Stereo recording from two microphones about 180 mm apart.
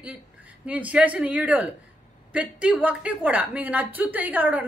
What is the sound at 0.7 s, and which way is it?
A woman's voice, 10° right (ahead or behind).